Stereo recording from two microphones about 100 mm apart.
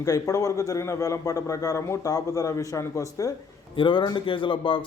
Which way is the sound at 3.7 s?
55° left (ahead or behind).